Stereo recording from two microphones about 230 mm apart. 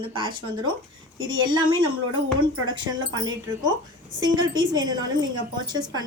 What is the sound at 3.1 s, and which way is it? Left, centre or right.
A woman's voice, centre.